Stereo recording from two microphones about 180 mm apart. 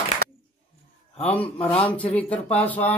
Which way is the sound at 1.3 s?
10° left (ahead or behind).